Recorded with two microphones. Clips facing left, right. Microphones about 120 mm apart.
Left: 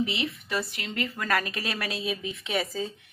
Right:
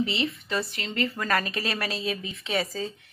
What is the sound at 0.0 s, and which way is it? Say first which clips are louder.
Speech: right 2 dB; 10° left (ahead or behind).